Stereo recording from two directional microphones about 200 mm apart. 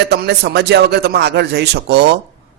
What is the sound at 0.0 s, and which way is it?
A man's voice, 55° right (ahead or behind).